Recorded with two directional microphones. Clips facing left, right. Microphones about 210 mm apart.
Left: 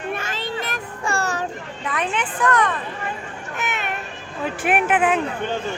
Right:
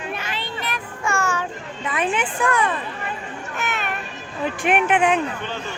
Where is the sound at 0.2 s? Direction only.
45° left (ahead or behind).